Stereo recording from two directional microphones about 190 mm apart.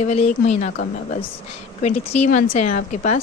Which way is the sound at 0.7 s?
55° left (ahead or behind).